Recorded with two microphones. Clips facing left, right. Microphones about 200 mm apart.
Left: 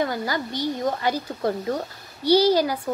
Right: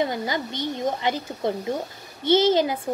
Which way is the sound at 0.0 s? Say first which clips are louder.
Even; 20° right (ahead or behind).